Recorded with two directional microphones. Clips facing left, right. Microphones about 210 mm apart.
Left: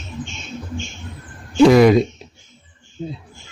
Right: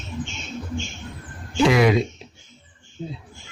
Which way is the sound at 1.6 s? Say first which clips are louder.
Left 7 dB; 40° left (ahead or behind).